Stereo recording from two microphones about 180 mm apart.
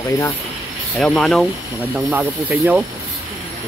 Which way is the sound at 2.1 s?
10° right (ahead or behind).